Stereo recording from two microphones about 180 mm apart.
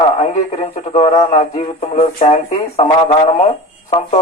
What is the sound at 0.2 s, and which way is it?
Speech, 40° left (ahead or behind).